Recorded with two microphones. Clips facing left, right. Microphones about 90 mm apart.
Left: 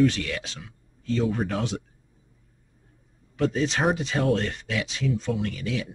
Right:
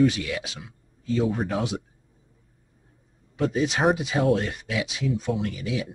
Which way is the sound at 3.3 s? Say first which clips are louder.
Even; 10° right (ahead or behind).